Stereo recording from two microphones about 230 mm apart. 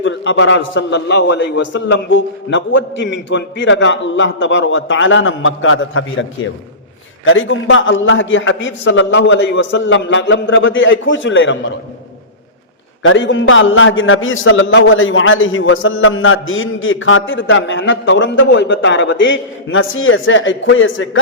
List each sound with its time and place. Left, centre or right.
0.0 s a man's voice: left
7.3 s a man's voice: left
13.0 s a man's voice: left